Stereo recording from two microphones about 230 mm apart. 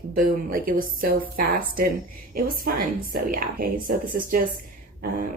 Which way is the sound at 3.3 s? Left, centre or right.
Right.